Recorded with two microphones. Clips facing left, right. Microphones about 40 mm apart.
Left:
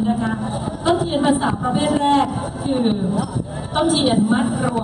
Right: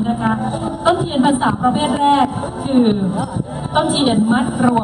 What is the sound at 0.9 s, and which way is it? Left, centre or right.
A man's voice, centre.